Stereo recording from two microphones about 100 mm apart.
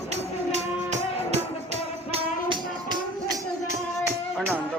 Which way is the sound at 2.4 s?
50° right (ahead or behind).